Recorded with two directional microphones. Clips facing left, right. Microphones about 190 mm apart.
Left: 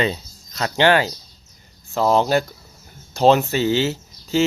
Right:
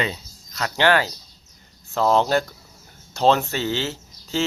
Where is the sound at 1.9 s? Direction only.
5° left (ahead or behind).